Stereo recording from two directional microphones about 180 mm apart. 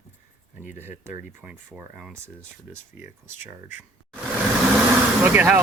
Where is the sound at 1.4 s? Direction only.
10° right (ahead or behind).